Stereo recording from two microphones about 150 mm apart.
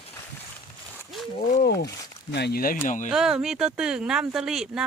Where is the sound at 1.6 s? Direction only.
90° left.